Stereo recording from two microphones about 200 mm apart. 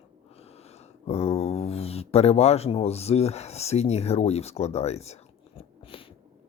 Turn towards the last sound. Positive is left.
turn(degrees=35)  # may be behind; listen again after turning